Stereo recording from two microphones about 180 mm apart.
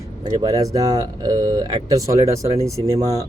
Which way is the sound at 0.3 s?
20° right (ahead or behind).